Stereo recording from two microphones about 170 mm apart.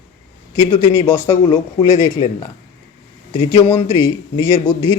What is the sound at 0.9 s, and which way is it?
Speech, 15° left (ahead or behind).